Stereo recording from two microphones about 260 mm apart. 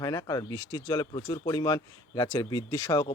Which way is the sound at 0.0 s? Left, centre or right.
Centre.